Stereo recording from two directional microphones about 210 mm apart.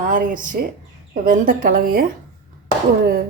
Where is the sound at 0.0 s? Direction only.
40° right (ahead or behind).